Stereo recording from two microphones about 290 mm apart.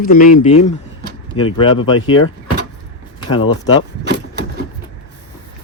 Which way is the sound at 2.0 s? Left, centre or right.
Left.